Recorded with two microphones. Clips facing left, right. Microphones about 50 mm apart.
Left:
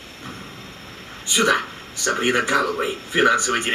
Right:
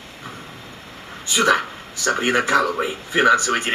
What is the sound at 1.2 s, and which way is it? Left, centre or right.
Speech, centre.